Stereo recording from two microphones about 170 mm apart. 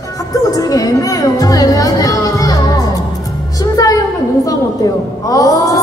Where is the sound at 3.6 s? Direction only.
20° left (ahead or behind).